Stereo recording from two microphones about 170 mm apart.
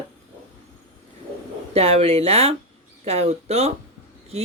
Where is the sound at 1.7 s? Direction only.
35° right (ahead or behind).